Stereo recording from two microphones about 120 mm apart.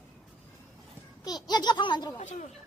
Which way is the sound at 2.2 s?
80° left.